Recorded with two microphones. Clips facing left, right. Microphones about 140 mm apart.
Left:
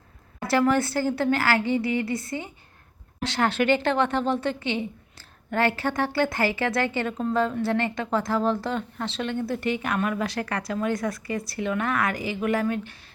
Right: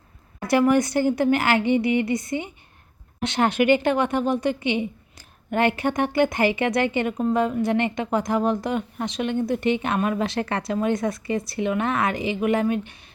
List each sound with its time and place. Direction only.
0.4 s a woman's voice: 15° right (ahead or behind)